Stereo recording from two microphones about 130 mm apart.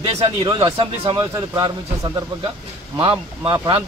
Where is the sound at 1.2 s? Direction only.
30° right (ahead or behind).